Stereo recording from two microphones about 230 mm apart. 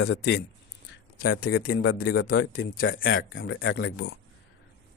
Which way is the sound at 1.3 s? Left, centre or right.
Left.